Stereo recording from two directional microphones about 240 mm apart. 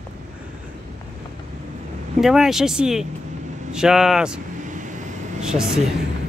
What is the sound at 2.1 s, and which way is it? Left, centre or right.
Speech, centre.